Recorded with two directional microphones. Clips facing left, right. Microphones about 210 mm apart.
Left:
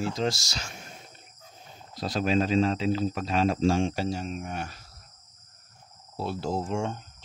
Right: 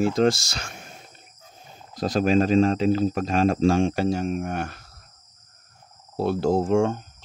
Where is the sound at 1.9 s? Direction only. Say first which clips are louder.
Right 6 dB; 50° right (ahead or behind).